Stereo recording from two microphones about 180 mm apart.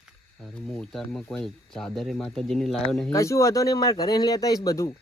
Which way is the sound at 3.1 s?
15° left (ahead or behind).